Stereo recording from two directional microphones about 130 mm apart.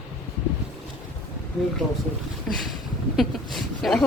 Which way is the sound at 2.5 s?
5° left (ahead or behind).